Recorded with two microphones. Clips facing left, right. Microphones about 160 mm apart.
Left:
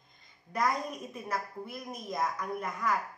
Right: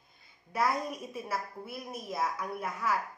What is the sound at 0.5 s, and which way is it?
Speech, 5° right (ahead or behind).